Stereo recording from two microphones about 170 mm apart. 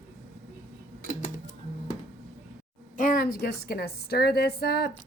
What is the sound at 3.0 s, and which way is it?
A woman's voice, 55° left (ahead or behind).